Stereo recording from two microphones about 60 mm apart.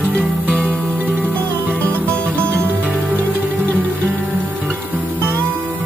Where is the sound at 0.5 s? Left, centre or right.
Right.